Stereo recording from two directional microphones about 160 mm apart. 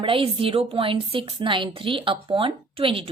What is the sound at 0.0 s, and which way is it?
A woman's voice, 35° right (ahead or behind).